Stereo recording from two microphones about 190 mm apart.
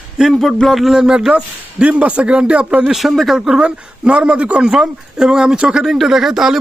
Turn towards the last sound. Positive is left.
turn(degrees=0)  # may be behind; listen again after turning